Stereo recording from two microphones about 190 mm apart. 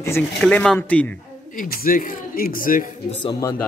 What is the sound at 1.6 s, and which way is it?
Speech, 45° left (ahead or behind).